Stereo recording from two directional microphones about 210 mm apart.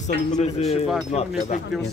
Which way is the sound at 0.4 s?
30° left (ahead or behind).